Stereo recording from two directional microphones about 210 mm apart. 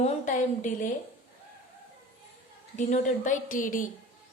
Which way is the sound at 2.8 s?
35° left (ahead or behind).